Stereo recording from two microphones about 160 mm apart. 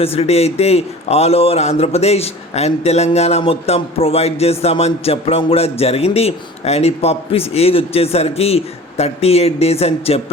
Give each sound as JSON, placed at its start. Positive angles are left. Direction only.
{"t": 0.0, "sound": "a man's voice", "side_deg": 40}